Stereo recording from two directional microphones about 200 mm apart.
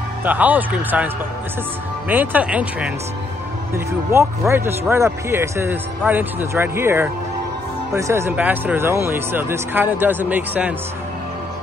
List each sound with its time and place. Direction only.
0.2 s speech: 10° right (ahead or behind)